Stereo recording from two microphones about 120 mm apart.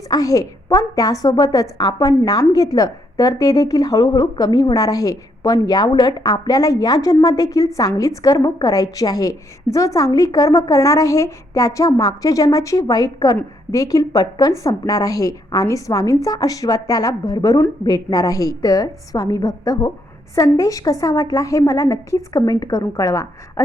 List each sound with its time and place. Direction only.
0.1 s a woman's voice: 30° left (ahead or behind)